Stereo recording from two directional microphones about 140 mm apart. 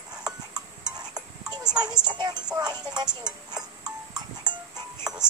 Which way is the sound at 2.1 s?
30° right (ahead or behind).